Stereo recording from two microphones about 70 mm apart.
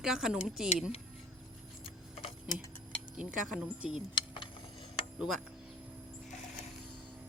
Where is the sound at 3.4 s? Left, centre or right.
Centre.